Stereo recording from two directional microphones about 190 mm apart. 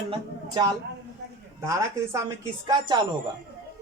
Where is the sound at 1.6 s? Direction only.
15° right (ahead or behind).